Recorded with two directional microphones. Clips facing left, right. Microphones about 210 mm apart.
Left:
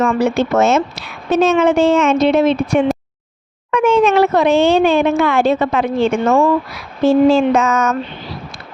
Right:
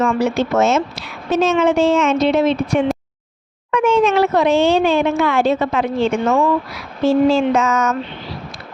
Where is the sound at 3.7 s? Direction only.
55° left (ahead or behind).